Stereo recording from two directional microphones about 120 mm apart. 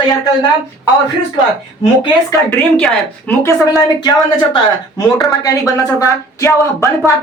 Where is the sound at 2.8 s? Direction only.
5° left (ahead or behind).